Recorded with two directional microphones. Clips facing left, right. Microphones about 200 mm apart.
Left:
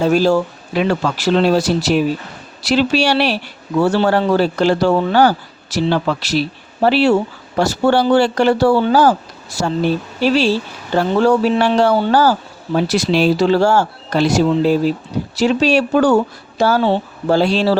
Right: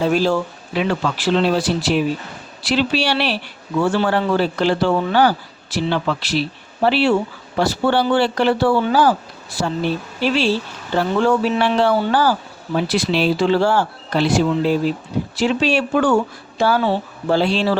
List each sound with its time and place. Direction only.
0.0 s a man's voice: 40° left (ahead or behind)